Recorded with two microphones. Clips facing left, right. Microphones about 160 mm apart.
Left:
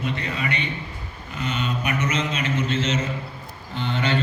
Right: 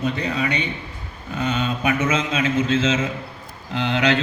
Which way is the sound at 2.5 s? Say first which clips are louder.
Right 4 dB; 90° right.